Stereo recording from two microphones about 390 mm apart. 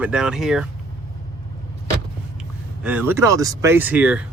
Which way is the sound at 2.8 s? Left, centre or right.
Centre.